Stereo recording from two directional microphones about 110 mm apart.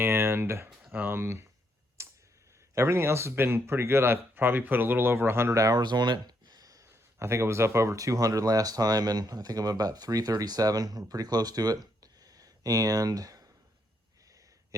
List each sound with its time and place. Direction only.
0.0 s speech: 20° right (ahead or behind)
2.0 s tick: 25° right (ahead or behind)
2.7 s speech: 25° right (ahead or behind)